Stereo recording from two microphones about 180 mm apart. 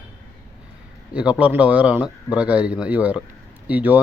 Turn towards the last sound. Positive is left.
turn(degrees=-10)  # may be behind; listen again after turning